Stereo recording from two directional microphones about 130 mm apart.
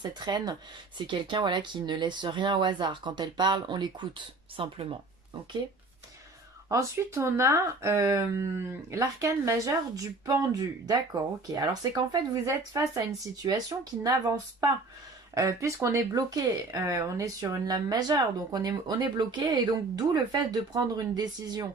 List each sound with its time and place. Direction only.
0.0 s speech: 35° right (ahead or behind)
6.7 s speech: 25° right (ahead or behind)
15.4 s speech: 20° right (ahead or behind)